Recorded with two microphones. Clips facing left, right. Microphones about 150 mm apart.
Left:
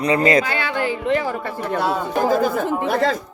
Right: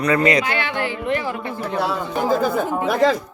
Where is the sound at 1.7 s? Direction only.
50° left (ahead or behind).